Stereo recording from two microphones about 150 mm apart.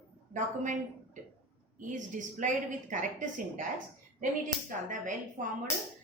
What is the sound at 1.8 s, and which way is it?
A woman's voice, 60° right (ahead or behind).